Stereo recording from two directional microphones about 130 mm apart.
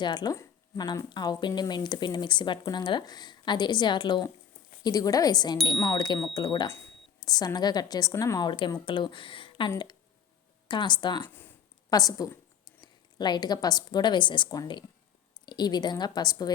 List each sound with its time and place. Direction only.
0.0 s speech: 35° left (ahead or behind)
6.7 s speech: 20° left (ahead or behind)
7.3 s a woman's voice: 30° left (ahead or behind)